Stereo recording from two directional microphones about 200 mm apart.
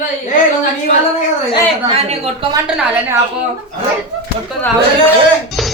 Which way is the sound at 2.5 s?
15° right (ahead or behind).